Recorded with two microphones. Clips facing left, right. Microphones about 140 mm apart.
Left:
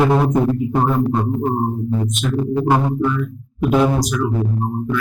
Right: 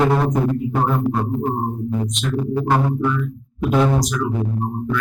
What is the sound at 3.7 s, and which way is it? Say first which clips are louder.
Speech: left 1 dB; 5° left (ahead or behind).